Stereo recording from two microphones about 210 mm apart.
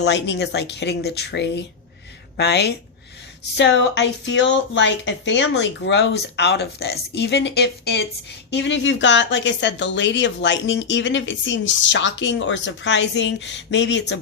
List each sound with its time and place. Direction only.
0.0 s a woman's voice: 55° left (ahead or behind)